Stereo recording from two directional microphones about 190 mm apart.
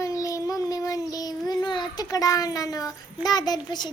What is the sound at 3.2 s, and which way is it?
Speech, 20° left (ahead or behind).